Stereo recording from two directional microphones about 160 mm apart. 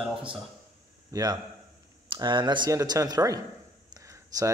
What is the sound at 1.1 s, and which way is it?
Speech, 25° right (ahead or behind).